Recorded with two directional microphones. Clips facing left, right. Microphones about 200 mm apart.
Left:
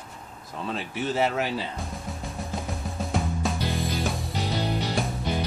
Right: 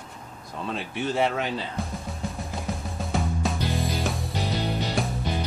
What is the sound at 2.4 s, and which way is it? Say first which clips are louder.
Music: even; centre (ahead or behind).